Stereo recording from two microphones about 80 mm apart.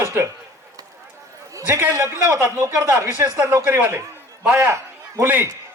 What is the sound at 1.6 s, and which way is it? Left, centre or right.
Speech, right.